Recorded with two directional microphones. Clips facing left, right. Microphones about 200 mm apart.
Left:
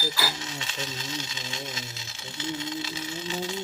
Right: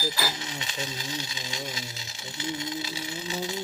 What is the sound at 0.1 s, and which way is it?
Speech, 15° right (ahead or behind).